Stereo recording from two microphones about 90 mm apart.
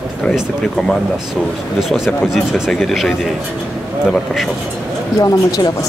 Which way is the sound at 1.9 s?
5° right (ahead or behind).